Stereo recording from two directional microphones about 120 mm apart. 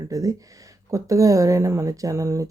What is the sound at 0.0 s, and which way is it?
Speech, 30° right (ahead or behind).